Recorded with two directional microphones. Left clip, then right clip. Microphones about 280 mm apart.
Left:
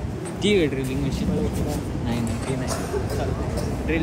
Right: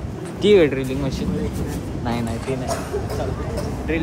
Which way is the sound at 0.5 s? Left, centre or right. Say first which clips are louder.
Right 7 dB; right.